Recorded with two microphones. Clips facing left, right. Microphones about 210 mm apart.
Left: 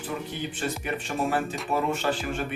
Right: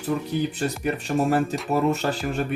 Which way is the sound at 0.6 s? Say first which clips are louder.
Right 5 dB; 40° right (ahead or behind).